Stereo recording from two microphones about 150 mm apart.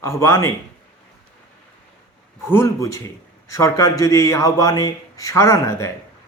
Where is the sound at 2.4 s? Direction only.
15° left (ahead or behind).